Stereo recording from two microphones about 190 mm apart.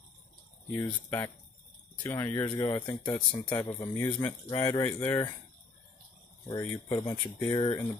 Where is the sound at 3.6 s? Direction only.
20° left (ahead or behind).